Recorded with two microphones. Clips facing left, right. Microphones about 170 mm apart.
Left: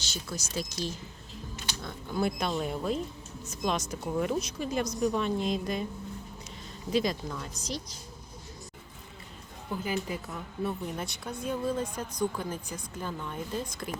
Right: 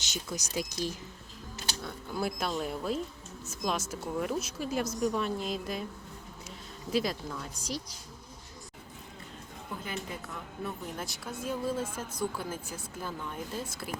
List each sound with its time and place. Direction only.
0.0 s speech: 15° right (ahead or behind)
6.9 s speech: 5° right (ahead or behind)
9.8 s a woman's voice: 10° left (ahead or behind)